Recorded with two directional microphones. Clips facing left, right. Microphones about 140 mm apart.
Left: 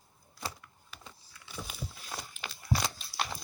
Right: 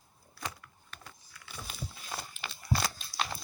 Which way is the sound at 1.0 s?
20° left (ahead or behind).